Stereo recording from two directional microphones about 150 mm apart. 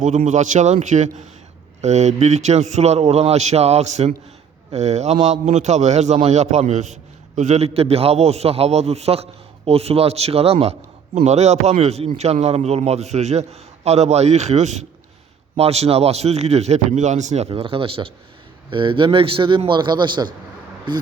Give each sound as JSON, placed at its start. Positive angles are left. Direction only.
{"t": 0.3, "sound": "a man's voice", "side_deg": -55}